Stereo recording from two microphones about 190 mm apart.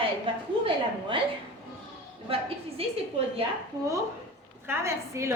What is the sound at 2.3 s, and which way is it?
A woman's voice, 30° right (ahead or behind).